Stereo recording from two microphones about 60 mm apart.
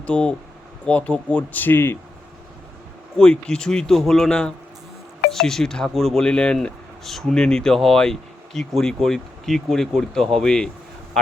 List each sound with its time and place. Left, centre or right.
0.0 s speech: centre; by 2.0 s left
3.2 s speech: centre
7.0 s speech: centre